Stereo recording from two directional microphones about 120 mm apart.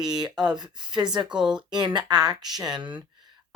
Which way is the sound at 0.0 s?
35° right (ahead or behind).